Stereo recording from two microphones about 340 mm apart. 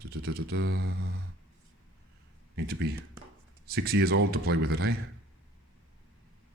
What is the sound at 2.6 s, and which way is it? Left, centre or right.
Speech, right.